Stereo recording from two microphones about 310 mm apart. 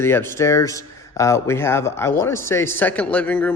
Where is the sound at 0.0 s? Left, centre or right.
Centre.